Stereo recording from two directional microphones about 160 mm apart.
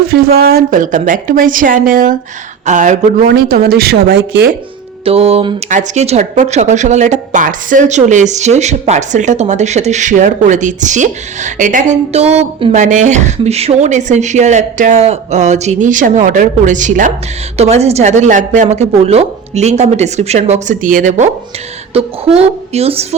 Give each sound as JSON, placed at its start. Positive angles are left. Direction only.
{"t": 0.1, "sound": "a woman's voice", "side_deg": -70}
{"t": 3.2, "sound": "speech", "side_deg": -75}
{"t": 5.0, "sound": "speech", "side_deg": -40}
{"t": 5.6, "sound": "speech", "side_deg": -50}
{"t": 12.7, "sound": "speech", "side_deg": -50}
{"t": 17.6, "sound": "speech", "side_deg": -40}
{"t": 21.9, "sound": "speech", "side_deg": -35}